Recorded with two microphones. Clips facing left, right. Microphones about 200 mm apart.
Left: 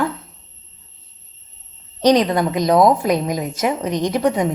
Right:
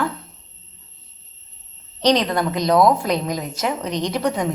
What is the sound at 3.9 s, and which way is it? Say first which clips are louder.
Speech: left 3 dB; 50° left (ahead or behind).